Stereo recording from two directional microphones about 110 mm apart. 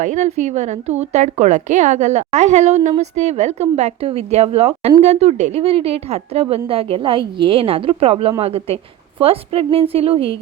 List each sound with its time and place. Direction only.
0.0 s a woman's voice: 90° right; by 6.6 s 65° right (ahead or behind)
6.7 s a woman's voice: 55° right (ahead or behind)